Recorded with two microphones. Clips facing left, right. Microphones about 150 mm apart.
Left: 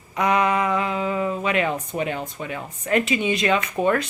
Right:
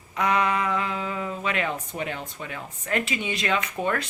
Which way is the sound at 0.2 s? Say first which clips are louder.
Left 3 dB; 20° left (ahead or behind).